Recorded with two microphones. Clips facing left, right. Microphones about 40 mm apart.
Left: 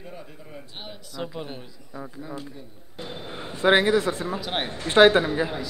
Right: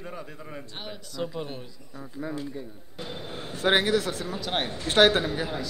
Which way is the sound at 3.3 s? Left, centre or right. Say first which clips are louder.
Left 4 dB; left.